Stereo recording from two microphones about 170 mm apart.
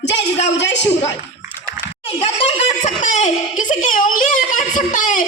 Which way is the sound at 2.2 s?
40° left (ahead or behind).